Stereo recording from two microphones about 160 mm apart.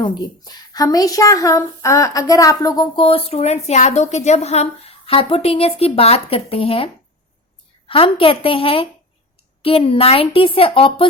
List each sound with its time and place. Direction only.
0.0 s a woman's voice: 25° left (ahead or behind)